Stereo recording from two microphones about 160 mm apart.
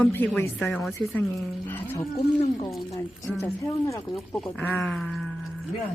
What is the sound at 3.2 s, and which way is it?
Speech, 20° left (ahead or behind).